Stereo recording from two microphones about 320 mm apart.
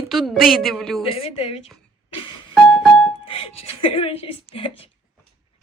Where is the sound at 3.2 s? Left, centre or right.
Centre.